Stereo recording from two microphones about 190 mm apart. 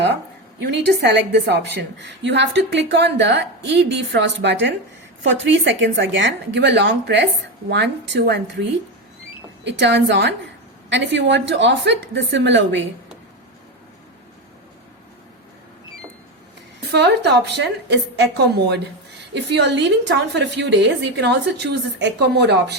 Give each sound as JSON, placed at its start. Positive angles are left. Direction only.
{"t": 0.8, "sound": "a woman's voice", "side_deg": -65}
{"t": 9.6, "sound": "a woman's voice", "side_deg": -65}
{"t": 16.9, "sound": "a woman's voice", "side_deg": -60}